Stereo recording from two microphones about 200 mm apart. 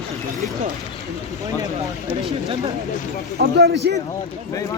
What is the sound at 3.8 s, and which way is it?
Speech, 55° right (ahead or behind).